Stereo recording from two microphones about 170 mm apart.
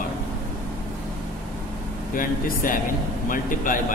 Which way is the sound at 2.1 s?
55° left (ahead or behind).